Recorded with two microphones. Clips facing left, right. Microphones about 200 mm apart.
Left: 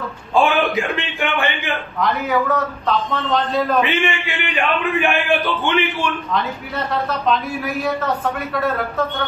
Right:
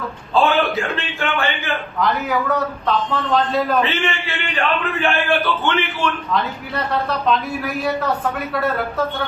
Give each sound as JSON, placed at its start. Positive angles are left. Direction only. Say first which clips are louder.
{"t": 0.3, "sound": "a man's voice", "louder": "even", "side_deg": 15}
{"t": 2.0, "sound": "a man's voice", "louder": "left 1 dB", "side_deg": 0}
{"t": 3.8, "sound": "a man's voice", "louder": "left 2 dB", "side_deg": 15}
{"t": 6.9, "sound": "a man's voice", "louder": "even", "side_deg": 0}